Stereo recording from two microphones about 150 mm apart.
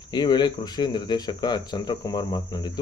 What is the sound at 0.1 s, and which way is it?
A man's voice, 30° left (ahead or behind).